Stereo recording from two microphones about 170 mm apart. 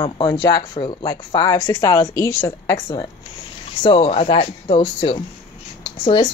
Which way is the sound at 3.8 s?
35° left (ahead or behind).